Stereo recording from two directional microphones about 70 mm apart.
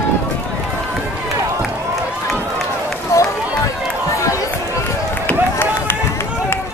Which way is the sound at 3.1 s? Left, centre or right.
Left.